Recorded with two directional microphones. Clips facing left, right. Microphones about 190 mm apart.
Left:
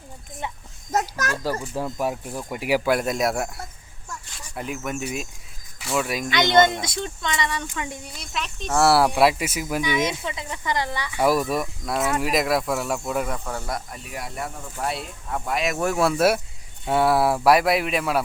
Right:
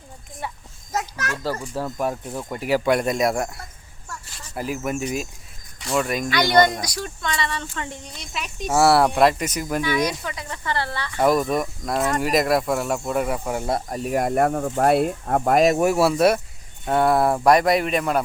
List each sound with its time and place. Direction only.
0.9 s a child's voice: 45° left (ahead or behind)
1.7 s speech: 10° left (ahead or behind)
4.5 s speech: centre (ahead or behind)
6.3 s speech: 20° left (ahead or behind); by 8.4 s centre (ahead or behind)
8.5 s speech: 10° right (ahead or behind)
8.8 s speech: centre (ahead or behind)
9.8 s speech: 20° left (ahead or behind); by 13.8 s 25° right (ahead or behind)
13.9 s speech: 45° right (ahead or behind)
15.8 s speech: 10° right (ahead or behind)